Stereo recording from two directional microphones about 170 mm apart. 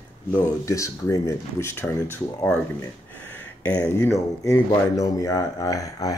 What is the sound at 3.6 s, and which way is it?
Speech, 10° left (ahead or behind).